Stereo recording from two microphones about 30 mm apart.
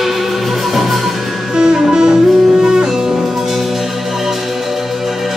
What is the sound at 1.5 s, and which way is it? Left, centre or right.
Music, right.